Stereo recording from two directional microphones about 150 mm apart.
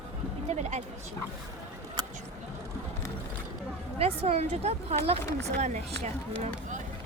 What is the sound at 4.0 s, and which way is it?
A woman's voice, 40° right (ahead or behind).